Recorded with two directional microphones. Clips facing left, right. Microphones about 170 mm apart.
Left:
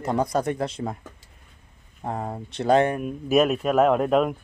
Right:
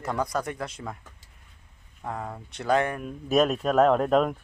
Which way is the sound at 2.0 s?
30° left (ahead or behind).